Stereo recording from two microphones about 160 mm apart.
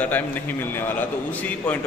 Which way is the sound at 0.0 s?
10° left (ahead or behind).